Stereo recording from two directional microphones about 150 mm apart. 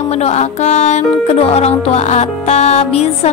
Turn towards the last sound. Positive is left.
turn(degrees=45)  # may be behind; listen again after turning